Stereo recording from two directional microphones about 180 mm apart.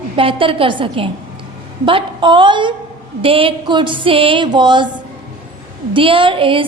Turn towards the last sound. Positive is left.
turn(degrees=-30)  # may be behind; listen again after turning